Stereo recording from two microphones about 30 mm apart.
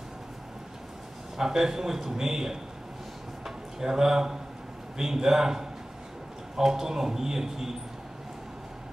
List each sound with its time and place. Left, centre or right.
1.4 s a man's voice: centre
3.4 s a sound: centre
4.9 s a man's voice: centre